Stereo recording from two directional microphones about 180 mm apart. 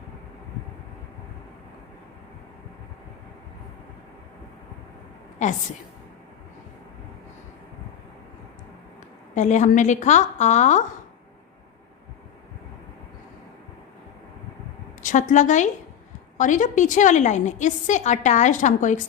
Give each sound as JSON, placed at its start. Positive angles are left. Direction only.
{"t": 5.4, "sound": "a woman's voice", "side_deg": 40}
{"t": 9.3, "sound": "a woman's voice", "side_deg": 40}
{"t": 15.0, "sound": "a woman's voice", "side_deg": 45}